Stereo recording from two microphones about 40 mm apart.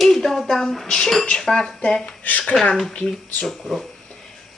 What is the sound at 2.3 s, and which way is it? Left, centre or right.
Speech, left.